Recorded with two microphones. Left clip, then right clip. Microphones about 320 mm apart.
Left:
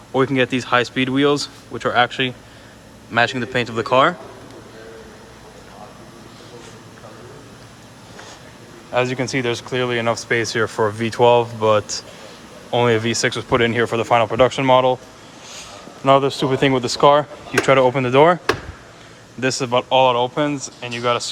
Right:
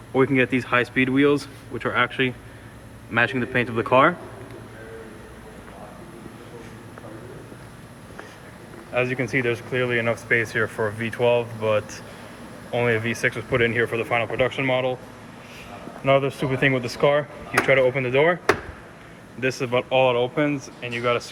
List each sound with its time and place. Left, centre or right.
0.1 s speech: centre
8.9 s a man's voice: centre
16.0 s speech: centre
19.4 s speech: centre